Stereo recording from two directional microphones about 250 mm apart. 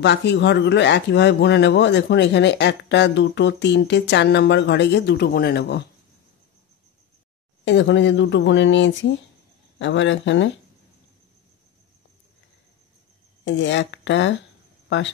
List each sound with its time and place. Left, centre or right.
0.0 s speech: left
7.6 s speech: left
13.4 s speech: left